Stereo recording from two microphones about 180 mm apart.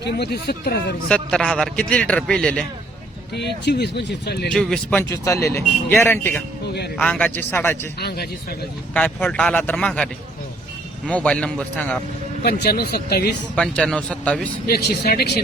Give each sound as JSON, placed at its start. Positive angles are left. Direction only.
{"t": 0.0, "sound": "speech", "side_deg": 65}
{"t": 1.0, "sound": "a man's voice", "side_deg": 5}
{"t": 3.3, "sound": "speech", "side_deg": 70}
{"t": 4.5, "sound": "a man's voice", "side_deg": 5}
{"t": 5.0, "sound": "a man's voice", "side_deg": 15}
{"t": 7.9, "sound": "speech", "side_deg": 60}
{"t": 8.9, "sound": "a man's voice", "side_deg": 10}
{"t": 11.1, "sound": "a man's voice", "side_deg": 5}
{"t": 12.4, "sound": "speech", "side_deg": 65}
{"t": 13.6, "sound": "a man's voice", "side_deg": 5}
{"t": 14.7, "sound": "speech", "side_deg": 60}